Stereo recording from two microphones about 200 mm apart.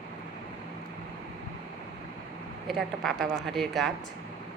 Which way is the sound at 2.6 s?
Centre (ahead or behind).